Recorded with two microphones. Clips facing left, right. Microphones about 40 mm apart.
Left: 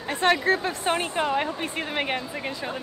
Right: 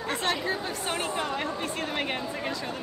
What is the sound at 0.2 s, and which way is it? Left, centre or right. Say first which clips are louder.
A woman's voice: left 11 dB; left.